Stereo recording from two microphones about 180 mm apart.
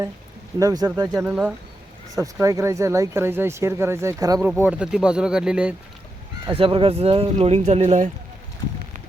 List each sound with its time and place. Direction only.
0.6 s speech: 20° right (ahead or behind)
1.1 s speech: 5° right (ahead or behind)
2.1 s speech: 20° right (ahead or behind)
4.6 s speech: 5° right (ahead or behind)
6.6 s speech: 30° right (ahead or behind)